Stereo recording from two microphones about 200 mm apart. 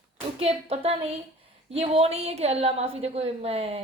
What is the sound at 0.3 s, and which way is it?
A woman's voice, 30° right (ahead or behind).